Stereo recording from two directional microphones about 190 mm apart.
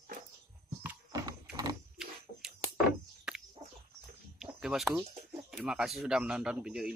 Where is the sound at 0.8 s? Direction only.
15° right (ahead or behind).